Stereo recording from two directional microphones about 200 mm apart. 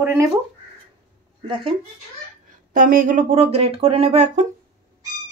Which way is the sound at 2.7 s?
40° right (ahead or behind).